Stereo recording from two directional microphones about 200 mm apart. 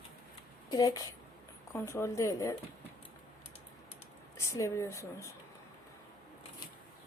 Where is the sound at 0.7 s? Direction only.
20° left (ahead or behind).